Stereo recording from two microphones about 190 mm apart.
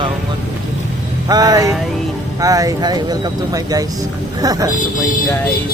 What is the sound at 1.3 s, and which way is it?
Speech, 20° right (ahead or behind).